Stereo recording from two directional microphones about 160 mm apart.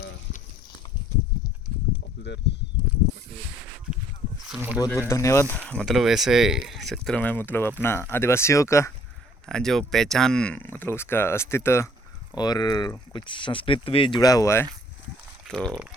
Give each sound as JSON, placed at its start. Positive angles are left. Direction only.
{"t": 4.4, "sound": "a sound", "side_deg": -10}
{"t": 4.9, "sound": "speech", "side_deg": 15}
{"t": 9.5, "sound": "speech", "side_deg": 5}
{"t": 15.4, "sound": "speech", "side_deg": 0}